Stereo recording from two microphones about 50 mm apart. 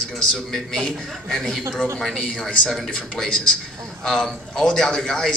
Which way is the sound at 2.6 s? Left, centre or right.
Centre.